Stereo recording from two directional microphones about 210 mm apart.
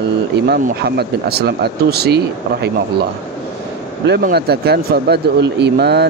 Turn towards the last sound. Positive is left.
turn(degrees=-50)  # may be behind; listen again after turning